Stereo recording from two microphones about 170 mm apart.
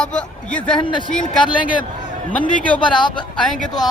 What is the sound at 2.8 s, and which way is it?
Speech, 30° left (ahead or behind).